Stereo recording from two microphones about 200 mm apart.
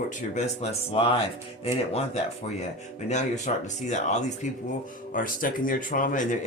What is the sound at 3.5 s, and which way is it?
Speech, 40° left (ahead or behind).